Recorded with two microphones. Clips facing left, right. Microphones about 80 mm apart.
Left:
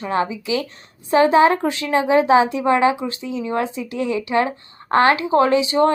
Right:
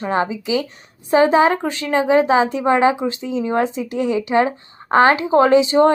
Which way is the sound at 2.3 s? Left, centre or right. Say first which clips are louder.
Even; right.